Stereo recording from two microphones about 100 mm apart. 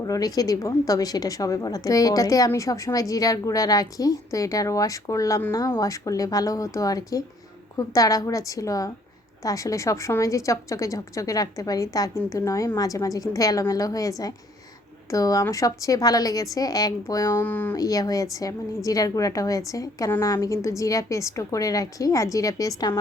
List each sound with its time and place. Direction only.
0.0 s a woman's voice: 40° left (ahead or behind)
17.3 s speech: 20° left (ahead or behind)
17.7 s a woman's voice: 35° left (ahead or behind)